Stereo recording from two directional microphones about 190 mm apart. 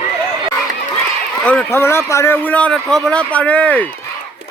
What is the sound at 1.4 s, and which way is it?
Speech, 5° left (ahead or behind).